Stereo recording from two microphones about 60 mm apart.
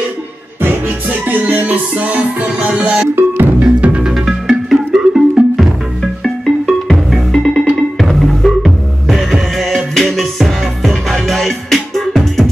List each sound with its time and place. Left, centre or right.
0.6 s music: right
3.2 s music: right
3.6 s music: centre
4.1 s music: centre
6.2 s music: centre